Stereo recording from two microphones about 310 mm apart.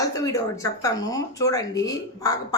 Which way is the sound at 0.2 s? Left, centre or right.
Centre.